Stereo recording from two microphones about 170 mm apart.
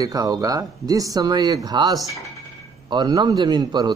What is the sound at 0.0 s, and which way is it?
Speech, 20° right (ahead or behind).